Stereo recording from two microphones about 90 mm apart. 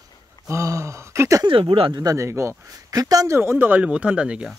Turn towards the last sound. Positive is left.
turn(degrees=-10)  # may be behind; listen again after turning